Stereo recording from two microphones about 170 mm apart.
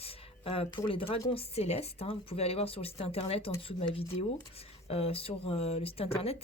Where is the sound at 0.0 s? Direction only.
35° left (ahead or behind).